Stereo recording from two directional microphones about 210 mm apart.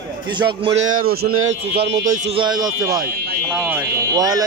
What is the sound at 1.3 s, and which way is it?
Speech, 80° right.